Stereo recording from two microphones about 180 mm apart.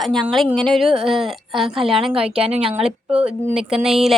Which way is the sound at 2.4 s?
35° right (ahead or behind).